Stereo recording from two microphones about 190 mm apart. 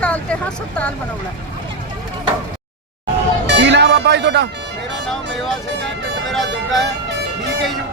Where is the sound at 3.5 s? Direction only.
65° right (ahead or behind).